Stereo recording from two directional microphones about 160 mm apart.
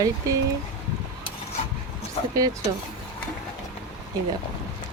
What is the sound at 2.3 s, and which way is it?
Speech, 25° right (ahead or behind).